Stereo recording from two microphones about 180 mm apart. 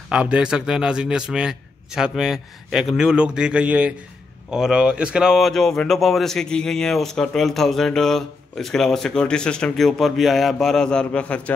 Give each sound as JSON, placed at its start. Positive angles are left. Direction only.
{"t": 0.1, "sound": "speech", "side_deg": -5}